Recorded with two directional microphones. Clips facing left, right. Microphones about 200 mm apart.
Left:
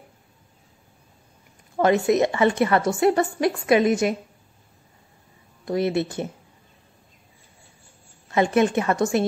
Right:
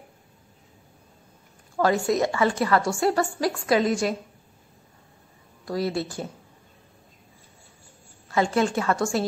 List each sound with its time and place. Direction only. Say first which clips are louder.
1.8 s a woman's voice: left 3 dB; 20° left (ahead or behind)
5.7 s a woman's voice: left 4 dB; 20° left (ahead or behind)
8.3 s a woman's voice: left 3 dB; 20° left (ahead or behind)